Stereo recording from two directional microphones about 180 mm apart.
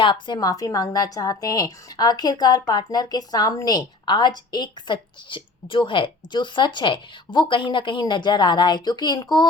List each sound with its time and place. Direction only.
0.0 s a woman's voice: 25° left (ahead or behind)